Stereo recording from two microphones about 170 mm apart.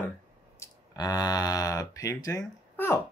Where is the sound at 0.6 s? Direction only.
20° left (ahead or behind).